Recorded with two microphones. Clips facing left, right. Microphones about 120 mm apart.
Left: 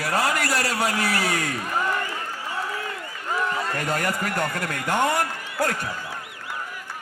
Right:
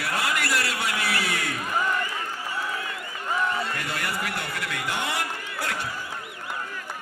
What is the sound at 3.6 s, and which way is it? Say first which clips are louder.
A man's voice: left 4 dB; 45° left (ahead or behind).